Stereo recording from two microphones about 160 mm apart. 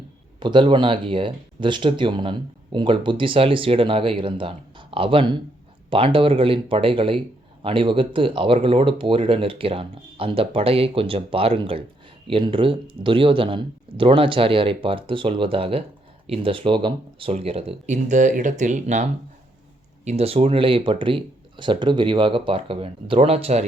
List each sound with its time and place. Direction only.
0.3 s speech: 30° right (ahead or behind); by 19.0 s 50° right (ahead or behind)
20.1 s speech: 40° right (ahead or behind)